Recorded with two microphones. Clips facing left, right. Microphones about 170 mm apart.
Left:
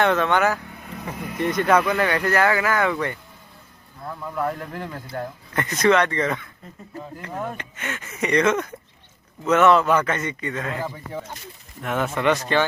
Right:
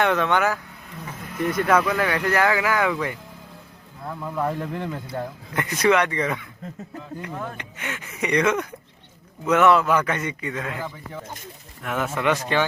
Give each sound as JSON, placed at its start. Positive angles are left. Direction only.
{"t": 0.0, "sound": "speech", "side_deg": -10}
{"t": 4.7, "sound": "speech", "side_deg": -25}
{"t": 5.0, "sound": "speech", "side_deg": -10}
{"t": 10.8, "sound": "speech", "side_deg": 35}
{"t": 11.8, "sound": "speech", "side_deg": 0}